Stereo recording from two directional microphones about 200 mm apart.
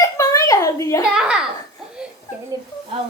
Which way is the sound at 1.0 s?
5° right (ahead or behind).